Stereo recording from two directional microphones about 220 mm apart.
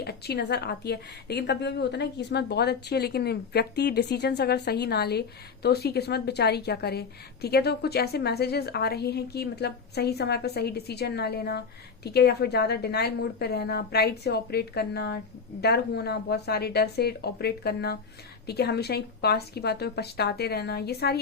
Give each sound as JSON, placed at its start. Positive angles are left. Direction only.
{"t": 0.0, "sound": "a woman's voice", "side_deg": 45}